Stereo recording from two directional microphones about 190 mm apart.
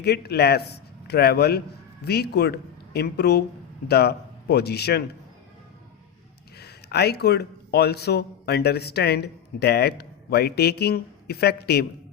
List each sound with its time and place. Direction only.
0.0 s a man's voice: 60° left (ahead or behind)
6.6 s a man's voice: 60° left (ahead or behind)